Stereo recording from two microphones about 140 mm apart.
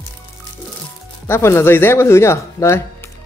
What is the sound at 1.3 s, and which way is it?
Speech, 20° left (ahead or behind).